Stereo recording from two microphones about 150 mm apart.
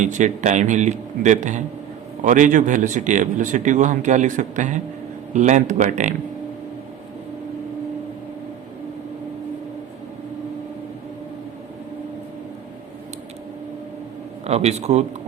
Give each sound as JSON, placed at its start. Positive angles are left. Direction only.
{"t": 0.0, "sound": "a man's voice", "side_deg": -55}
{"t": 14.4, "sound": "speech", "side_deg": -45}